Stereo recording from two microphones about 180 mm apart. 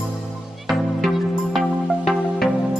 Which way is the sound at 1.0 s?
Centre (ahead or behind).